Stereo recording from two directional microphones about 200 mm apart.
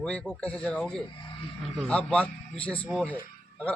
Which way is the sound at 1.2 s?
25° left (ahead or behind).